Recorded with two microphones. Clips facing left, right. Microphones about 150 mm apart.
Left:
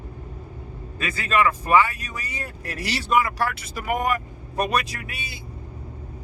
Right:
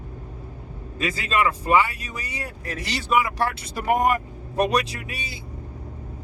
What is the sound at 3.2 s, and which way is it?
Speech, 25° right (ahead or behind).